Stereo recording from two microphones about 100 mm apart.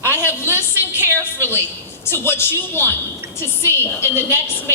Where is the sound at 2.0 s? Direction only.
25° left (ahead or behind).